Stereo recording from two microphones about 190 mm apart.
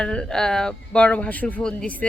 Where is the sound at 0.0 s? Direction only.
5° left (ahead or behind).